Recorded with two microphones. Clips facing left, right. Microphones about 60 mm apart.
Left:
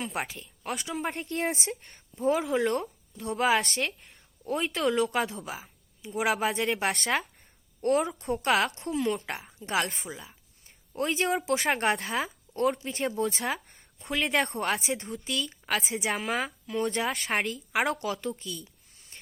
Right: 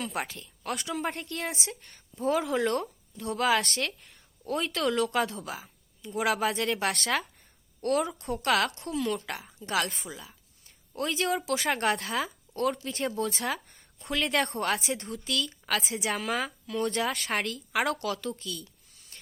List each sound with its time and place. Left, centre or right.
0.0 s speech: centre
1.2 s speech: left
2.2 s speech: centre
3.3 s speech: left
3.8 s a sound: centre
4.6 s speech: centre
5.0 s a woman's voice: centre
8.0 s a woman's voice: left
12.9 s speech: centre
13.1 s speech: left
14.0 s speech: centre; by 16.1 s left
16.1 s speech: centre
16.4 s speech: left